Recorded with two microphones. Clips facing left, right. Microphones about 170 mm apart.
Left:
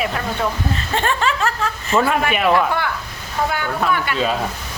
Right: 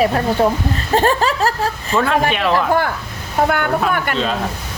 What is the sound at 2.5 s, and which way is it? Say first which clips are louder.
Speech: right 2 dB; 45° right (ahead or behind).